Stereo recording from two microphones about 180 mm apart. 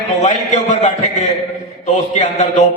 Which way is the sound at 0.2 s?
40° left (ahead or behind).